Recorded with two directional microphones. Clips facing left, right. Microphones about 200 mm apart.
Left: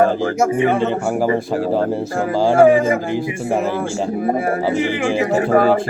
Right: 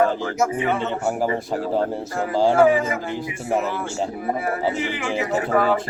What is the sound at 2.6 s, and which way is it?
Speech, 50° left (ahead or behind).